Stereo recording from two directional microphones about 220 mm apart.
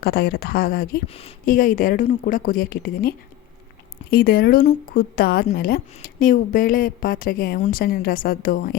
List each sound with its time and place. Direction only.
0.0 s speech: 45° left (ahead or behind)
1.0 s a woman's voice: 25° left (ahead or behind)